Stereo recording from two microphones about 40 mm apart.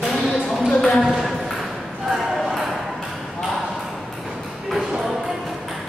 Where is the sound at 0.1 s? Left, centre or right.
Centre.